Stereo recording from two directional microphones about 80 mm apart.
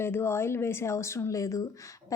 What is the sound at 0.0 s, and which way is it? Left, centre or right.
A woman's voice, left.